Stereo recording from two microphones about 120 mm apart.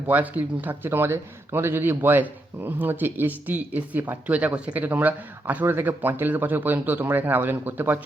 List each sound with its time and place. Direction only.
0.1 s speech: 15° right (ahead or behind)